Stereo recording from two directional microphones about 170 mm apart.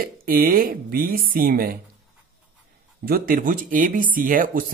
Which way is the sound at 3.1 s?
60° right (ahead or behind).